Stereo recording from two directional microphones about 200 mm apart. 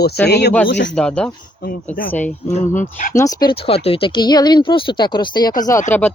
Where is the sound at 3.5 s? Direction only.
30° left (ahead or behind).